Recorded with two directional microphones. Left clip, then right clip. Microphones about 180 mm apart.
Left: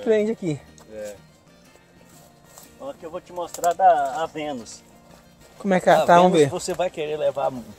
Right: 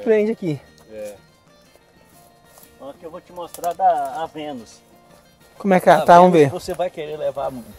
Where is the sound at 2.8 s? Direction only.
10° left (ahead or behind).